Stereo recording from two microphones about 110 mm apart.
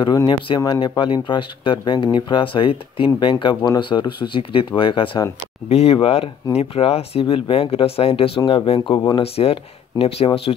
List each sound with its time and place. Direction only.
0.0 s speech: 40° left (ahead or behind)
5.7 s speech: 60° left (ahead or behind)